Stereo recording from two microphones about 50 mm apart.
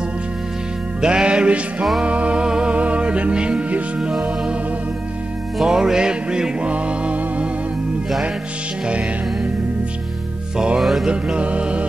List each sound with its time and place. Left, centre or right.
1.0 s music: centre
5.6 s music: centre
8.8 s music: right
10.8 s music: centre
11.1 s music: right